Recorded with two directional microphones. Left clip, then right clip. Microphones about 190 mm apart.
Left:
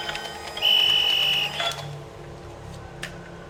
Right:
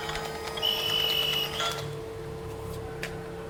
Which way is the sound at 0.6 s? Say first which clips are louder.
Left 8 dB; 15° left (ahead or behind).